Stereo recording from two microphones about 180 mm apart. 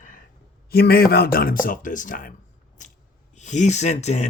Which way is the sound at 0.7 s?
60° left (ahead or behind).